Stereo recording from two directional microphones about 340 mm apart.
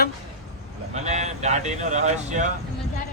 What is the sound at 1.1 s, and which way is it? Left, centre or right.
Speech, centre.